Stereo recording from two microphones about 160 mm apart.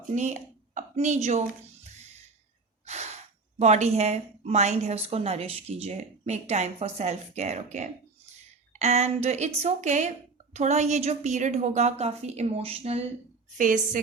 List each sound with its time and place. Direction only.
0.1 s speech: 50° right (ahead or behind)
2.8 s snort: 45° right (ahead or behind)
3.6 s speech: 45° right (ahead or behind)
13.6 s a woman's voice: 55° right (ahead or behind)